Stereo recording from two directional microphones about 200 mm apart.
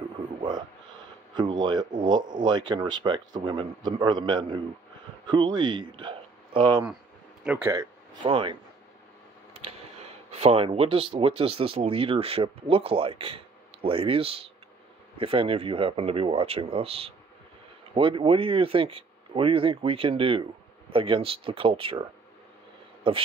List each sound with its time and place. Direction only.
0.4 s a sound: 20° right (ahead or behind)
1.3 s speech: 20° right (ahead or behind)
7.4 s speech: 10° right (ahead or behind); by 8.5 s 25° right (ahead or behind)
9.5 s tick: 30° right (ahead or behind)
10.3 s speech: 30° right (ahead or behind)
23.0 s speech: 25° right (ahead or behind)